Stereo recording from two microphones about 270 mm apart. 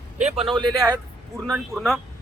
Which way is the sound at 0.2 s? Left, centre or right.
Right.